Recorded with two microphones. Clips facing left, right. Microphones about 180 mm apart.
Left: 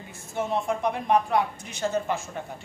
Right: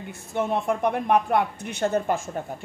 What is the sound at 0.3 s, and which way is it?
A woman's voice, 60° right (ahead or behind).